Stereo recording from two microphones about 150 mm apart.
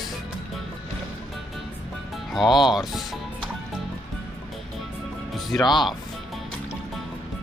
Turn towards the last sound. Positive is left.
turn(degrees=0)  # may be behind; listen again after turning